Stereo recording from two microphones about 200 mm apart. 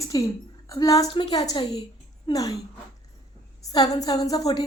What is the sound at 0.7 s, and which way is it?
Speech, 15° left (ahead or behind).